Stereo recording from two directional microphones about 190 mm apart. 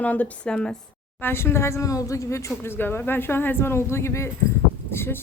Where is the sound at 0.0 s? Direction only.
10° left (ahead or behind).